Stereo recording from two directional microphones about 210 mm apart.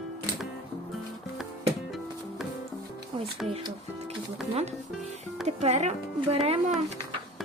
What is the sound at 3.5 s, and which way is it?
Speech, 30° right (ahead or behind).